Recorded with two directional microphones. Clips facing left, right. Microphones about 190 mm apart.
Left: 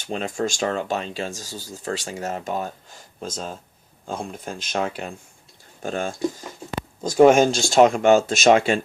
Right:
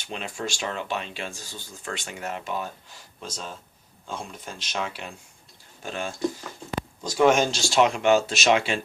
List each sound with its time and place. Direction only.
0.1 s speech: 40° left (ahead or behind)
7.3 s speech: 50° left (ahead or behind)